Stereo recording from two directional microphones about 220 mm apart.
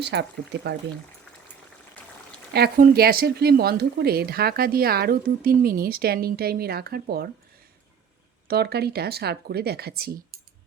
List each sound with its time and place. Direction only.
0.0 s speech: 50° right (ahead or behind)
2.5 s speech: 45° right (ahead or behind)
8.4 s speech: 45° right (ahead or behind)